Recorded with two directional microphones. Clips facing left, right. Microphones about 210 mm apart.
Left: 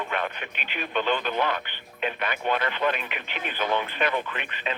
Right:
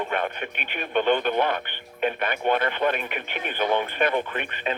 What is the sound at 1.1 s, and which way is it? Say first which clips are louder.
Speech: right 4 dB; 50° right (ahead or behind).